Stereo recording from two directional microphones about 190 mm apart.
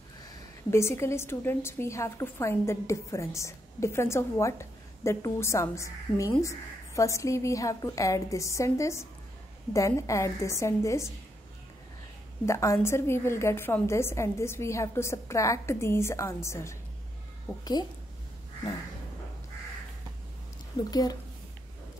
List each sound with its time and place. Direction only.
0.7 s a woman's voice: 15° left (ahead or behind)
12.4 s a woman's voice: 15° left (ahead or behind)
20.9 s a woman's voice: 20° left (ahead or behind)